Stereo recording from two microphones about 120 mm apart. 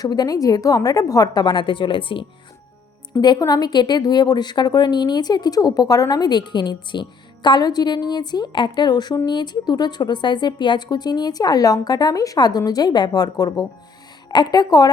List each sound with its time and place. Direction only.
0.0 s a woman's voice: 35° left (ahead or behind)
3.2 s a woman's voice: 35° left (ahead or behind)